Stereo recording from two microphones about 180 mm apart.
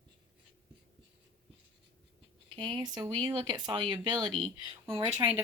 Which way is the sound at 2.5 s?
25° right (ahead or behind).